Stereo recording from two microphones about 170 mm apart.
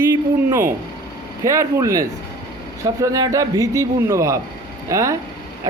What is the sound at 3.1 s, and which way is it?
A man's voice, 20° right (ahead or behind).